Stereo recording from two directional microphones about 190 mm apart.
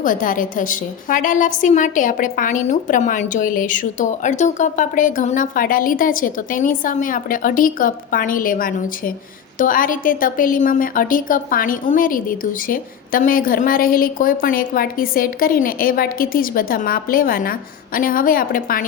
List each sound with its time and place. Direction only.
0.0 s a woman's voice: 45° left (ahead or behind)